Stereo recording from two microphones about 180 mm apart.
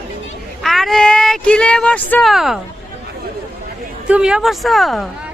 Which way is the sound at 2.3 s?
Centre (ahead or behind).